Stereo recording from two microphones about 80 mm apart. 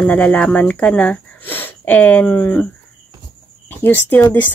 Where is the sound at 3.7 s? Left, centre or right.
Left.